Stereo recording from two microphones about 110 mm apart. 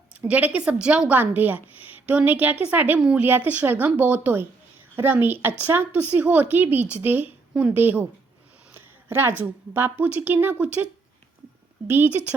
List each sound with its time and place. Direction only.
0.1 s a woman's voice: 15° right (ahead or behind)
8.7 s a sound: 20° right (ahead or behind)
9.4 s a woman's voice: 15° right (ahead or behind)
11.9 s a woman's voice: 15° right (ahead or behind)